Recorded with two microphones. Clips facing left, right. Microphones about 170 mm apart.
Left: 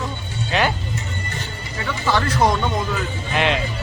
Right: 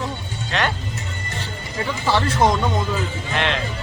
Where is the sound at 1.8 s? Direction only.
25° right (ahead or behind).